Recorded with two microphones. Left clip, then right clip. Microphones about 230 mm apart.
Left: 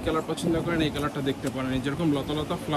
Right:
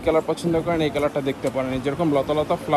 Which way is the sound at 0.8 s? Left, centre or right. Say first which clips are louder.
Right 6 dB; centre.